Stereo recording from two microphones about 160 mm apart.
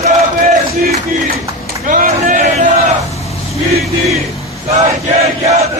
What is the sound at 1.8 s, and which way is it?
Speech, 60° right (ahead or behind).